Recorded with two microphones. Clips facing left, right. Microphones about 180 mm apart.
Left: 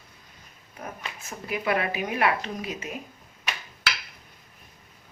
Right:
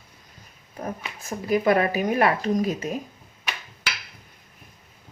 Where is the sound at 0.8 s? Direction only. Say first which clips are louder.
Right 5 dB; 35° right (ahead or behind).